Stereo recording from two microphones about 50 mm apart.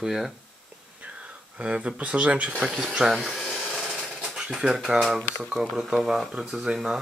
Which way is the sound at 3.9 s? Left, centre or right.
Centre.